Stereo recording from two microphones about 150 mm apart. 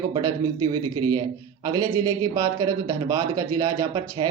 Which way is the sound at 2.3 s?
20° right (ahead or behind).